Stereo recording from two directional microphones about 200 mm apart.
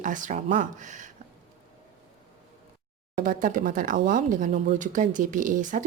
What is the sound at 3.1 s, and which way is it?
Speech, 45° right (ahead or behind).